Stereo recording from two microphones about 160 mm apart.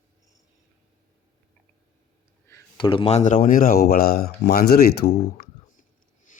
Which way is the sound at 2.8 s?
35° left (ahead or behind).